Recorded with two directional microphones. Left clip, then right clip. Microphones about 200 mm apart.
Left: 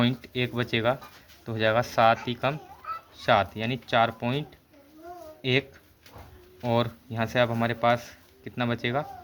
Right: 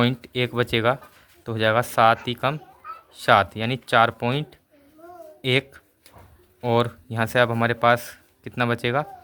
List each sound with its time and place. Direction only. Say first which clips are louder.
0.0 s speech: right 4 dB; 35° right (ahead or behind)